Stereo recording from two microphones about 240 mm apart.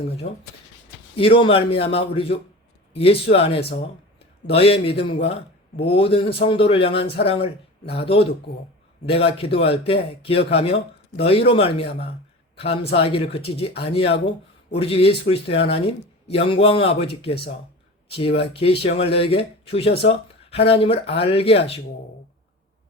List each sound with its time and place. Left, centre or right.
0.2 s speech: left
1.1 s a man's voice: left